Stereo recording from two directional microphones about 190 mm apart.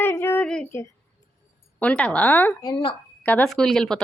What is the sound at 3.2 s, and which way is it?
Speech, 5° left (ahead or behind).